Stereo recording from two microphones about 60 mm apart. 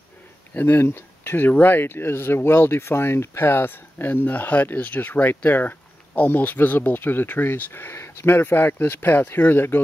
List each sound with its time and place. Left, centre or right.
0.6 s speech: left
8.3 s speech: left